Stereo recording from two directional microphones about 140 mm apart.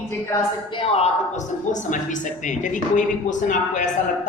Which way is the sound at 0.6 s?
40° left (ahead or behind).